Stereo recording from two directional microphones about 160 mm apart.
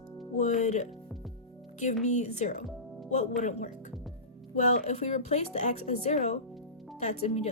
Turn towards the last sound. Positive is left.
turn(degrees=40)  # may be behind; listen again after turning